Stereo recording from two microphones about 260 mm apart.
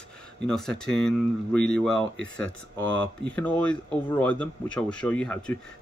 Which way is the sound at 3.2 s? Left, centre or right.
Centre.